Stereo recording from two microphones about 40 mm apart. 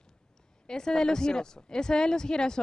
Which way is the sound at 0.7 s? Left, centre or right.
Centre.